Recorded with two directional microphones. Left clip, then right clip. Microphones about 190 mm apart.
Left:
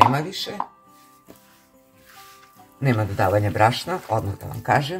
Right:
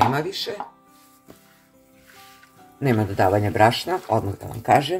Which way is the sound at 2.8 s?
25° right (ahead or behind).